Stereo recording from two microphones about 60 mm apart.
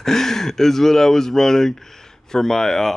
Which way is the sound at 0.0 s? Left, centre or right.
Centre.